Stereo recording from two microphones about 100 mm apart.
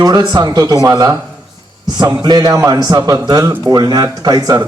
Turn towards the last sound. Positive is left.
turn(degrees=-35)  # may be behind; listen again after turning